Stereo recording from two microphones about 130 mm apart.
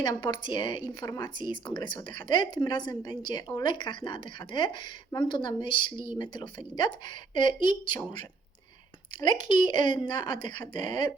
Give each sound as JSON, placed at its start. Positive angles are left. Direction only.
{"t": 0.0, "sound": "a woman's voice", "side_deg": 35}
{"t": 9.5, "sound": "a woman's voice", "side_deg": 35}